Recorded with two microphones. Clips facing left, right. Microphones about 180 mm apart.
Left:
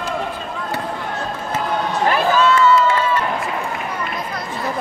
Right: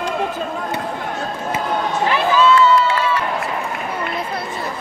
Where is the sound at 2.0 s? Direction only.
45° left (ahead or behind).